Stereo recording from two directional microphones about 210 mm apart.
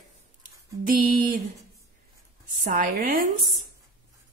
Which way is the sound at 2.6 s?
40° right (ahead or behind).